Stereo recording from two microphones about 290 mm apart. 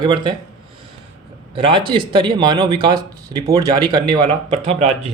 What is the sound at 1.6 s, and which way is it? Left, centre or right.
Speech, centre.